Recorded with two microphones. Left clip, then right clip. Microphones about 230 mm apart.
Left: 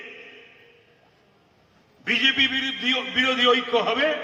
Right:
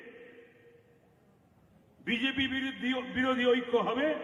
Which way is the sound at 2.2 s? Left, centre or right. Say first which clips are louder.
Left 12 dB; left.